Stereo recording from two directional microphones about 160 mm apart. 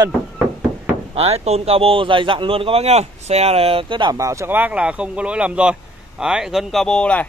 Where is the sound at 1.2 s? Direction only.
40° right (ahead or behind).